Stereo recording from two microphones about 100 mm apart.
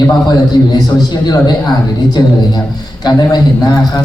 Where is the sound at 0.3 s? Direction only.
45° left (ahead or behind).